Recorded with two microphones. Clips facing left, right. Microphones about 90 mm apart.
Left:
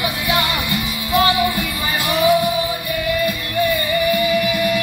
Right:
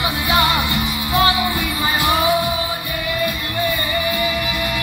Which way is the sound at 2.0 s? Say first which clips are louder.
Left 2 dB; 20° right (ahead or behind).